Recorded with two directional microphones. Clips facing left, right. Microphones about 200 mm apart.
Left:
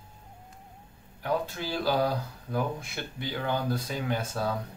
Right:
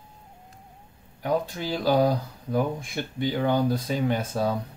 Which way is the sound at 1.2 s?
15° right (ahead or behind).